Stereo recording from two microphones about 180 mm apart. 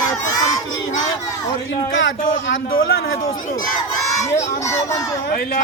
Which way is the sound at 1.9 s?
90° left.